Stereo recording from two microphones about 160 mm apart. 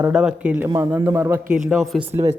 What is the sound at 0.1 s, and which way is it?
Speech, 5° right (ahead or behind).